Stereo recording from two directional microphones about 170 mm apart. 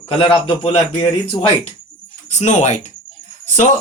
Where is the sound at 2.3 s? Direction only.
45° left (ahead or behind).